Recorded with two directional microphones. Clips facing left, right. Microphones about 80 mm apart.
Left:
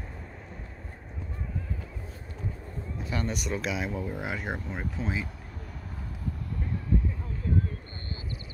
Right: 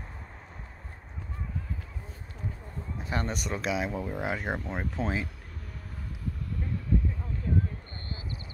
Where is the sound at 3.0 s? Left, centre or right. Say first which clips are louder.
Even; right.